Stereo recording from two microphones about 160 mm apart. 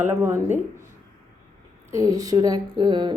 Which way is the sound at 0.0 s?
15° right (ahead or behind).